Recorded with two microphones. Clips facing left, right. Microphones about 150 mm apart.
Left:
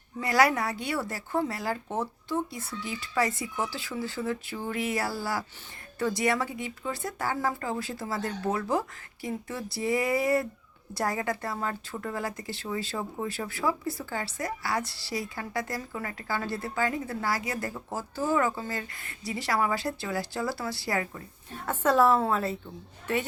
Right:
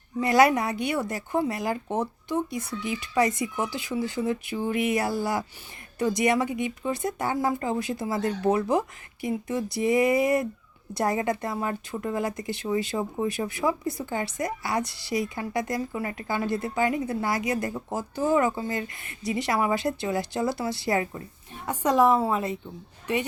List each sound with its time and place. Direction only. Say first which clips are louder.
0.2 s a woman's voice: right 4 dB; 20° right (ahead or behind)